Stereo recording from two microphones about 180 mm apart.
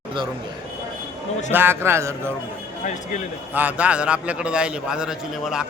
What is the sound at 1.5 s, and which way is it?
Speech, 10° right (ahead or behind).